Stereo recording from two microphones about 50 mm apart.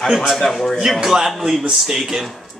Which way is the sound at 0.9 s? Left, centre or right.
Centre.